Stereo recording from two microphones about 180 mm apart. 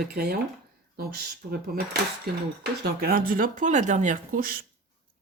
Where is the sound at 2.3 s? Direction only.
60° right (ahead or behind).